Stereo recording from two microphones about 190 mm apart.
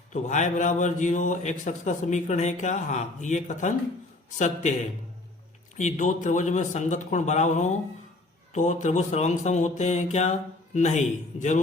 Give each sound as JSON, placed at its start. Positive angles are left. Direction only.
{"t": 0.1, "sound": "a man's voice", "side_deg": 40}